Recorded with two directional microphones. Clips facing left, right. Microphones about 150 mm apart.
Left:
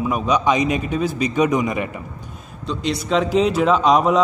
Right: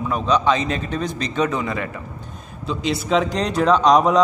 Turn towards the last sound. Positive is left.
turn(degrees=0)  # may be behind; listen again after turning